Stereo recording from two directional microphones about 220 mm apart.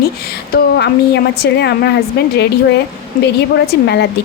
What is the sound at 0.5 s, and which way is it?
Speech, 50° left (ahead or behind).